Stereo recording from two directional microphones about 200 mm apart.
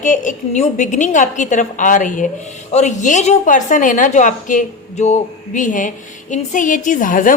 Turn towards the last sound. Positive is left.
turn(degrees=40)  # may be behind; listen again after turning